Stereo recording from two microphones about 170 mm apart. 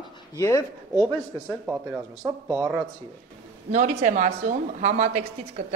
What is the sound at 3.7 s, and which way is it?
A woman's voice, 45° right (ahead or behind).